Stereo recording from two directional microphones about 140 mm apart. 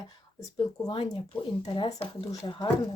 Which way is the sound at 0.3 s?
25° left (ahead or behind).